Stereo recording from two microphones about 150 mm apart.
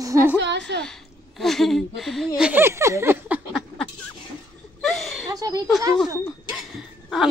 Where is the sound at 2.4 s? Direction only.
15° right (ahead or behind).